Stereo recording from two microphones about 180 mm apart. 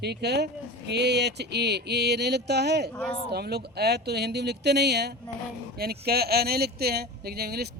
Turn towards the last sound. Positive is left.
turn(degrees=-60)  # may be behind; listen again after turning